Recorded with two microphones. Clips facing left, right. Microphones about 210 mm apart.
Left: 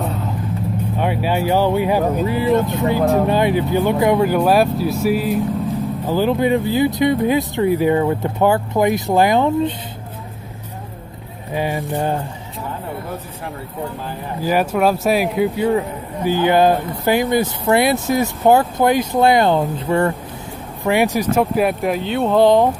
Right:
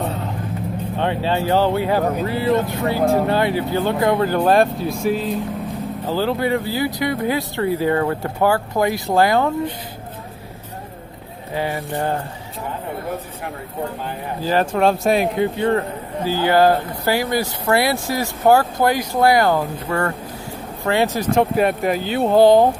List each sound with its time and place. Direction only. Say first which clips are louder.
0.9 s speech: even; 10° left (ahead or behind)
11.5 s speech: left 2 dB; 15° left (ahead or behind)
14.4 s speech: left 1 dB; 10° left (ahead or behind)
16.3 s speech: left 1 dB; 20° left (ahead or behind); by 22.6 s 5° right (ahead or behind)